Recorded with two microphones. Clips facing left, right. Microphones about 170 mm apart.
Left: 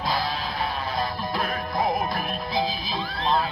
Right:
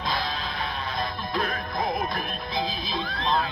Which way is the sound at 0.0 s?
35° left (ahead or behind).